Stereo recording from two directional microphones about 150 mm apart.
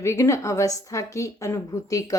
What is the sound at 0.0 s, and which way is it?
A woman's voice, 20° left (ahead or behind).